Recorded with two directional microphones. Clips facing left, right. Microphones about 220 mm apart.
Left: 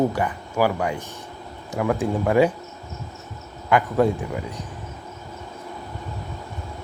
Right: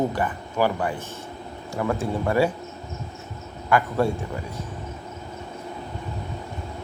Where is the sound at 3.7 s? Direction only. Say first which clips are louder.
Left 3 dB; 15° left (ahead or behind).